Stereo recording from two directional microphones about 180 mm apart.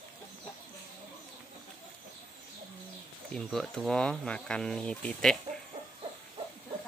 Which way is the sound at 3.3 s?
Centre (ahead or behind).